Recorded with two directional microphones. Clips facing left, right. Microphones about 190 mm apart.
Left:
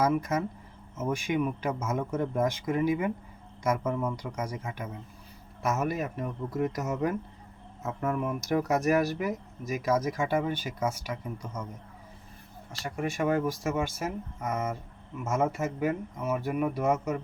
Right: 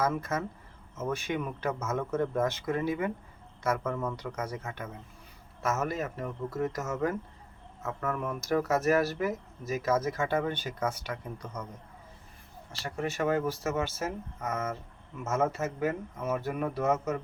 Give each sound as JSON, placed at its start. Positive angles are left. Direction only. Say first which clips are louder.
{"t": 0.0, "sound": "speech", "louder": "left 3 dB", "side_deg": 15}
{"t": 12.7, "sound": "speech", "louder": "left 1 dB", "side_deg": 15}